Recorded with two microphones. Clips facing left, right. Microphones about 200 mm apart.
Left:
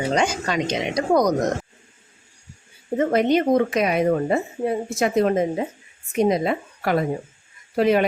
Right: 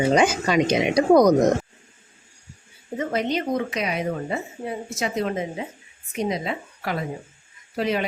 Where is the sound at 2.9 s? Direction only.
55° left (ahead or behind).